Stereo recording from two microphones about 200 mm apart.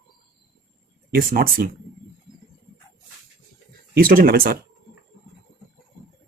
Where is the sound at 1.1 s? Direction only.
45° right (ahead or behind).